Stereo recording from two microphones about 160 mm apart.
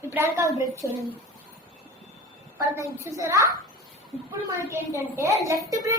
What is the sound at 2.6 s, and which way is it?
A woman's voice, 20° right (ahead or behind).